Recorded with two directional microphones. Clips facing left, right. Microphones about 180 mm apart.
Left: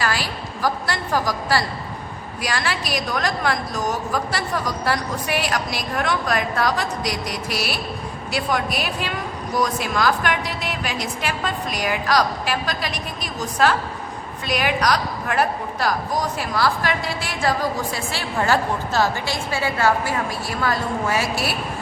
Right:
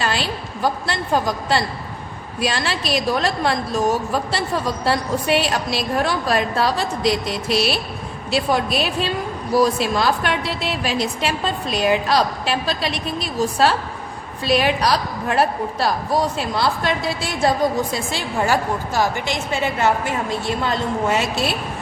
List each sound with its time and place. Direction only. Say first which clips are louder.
0.0 s a woman's voice: right 2 dB; 25° right (ahead or behind)